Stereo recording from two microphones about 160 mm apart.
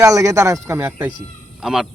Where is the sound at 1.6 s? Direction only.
5° right (ahead or behind).